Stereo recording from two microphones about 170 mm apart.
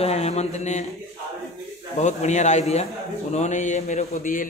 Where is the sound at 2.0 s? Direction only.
45° left (ahead or behind).